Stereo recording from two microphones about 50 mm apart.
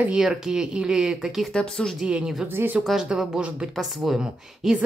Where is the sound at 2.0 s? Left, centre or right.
Centre.